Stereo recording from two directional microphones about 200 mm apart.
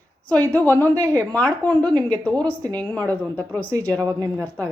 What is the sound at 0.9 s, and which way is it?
Speech, 15° right (ahead or behind).